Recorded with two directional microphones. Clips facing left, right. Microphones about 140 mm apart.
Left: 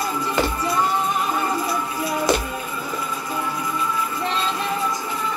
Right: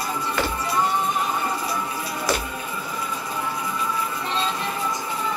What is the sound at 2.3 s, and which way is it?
Music, 25° left (ahead or behind).